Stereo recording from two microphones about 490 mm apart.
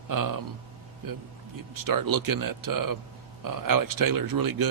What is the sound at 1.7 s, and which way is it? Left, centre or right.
A man's voice, right.